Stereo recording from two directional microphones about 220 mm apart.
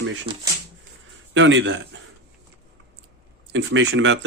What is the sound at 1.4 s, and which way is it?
Speech, 60° right (ahead or behind).